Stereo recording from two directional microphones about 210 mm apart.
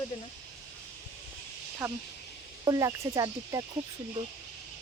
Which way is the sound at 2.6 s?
15° right (ahead or behind).